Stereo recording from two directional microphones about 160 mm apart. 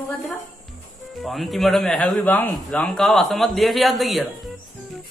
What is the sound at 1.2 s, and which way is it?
A man's voice, centre (ahead or behind).